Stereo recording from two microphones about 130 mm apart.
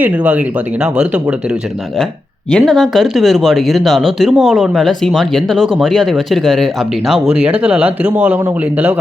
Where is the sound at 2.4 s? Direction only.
5° left (ahead or behind).